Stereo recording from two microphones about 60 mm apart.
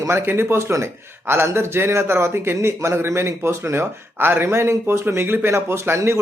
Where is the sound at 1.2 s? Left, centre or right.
Right.